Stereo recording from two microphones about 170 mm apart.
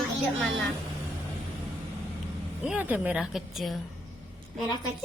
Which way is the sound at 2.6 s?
5° right (ahead or behind).